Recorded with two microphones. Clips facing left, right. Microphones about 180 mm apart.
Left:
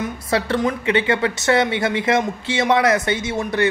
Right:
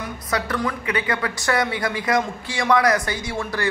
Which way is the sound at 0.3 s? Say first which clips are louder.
Left 4 dB; 25° left (ahead or behind).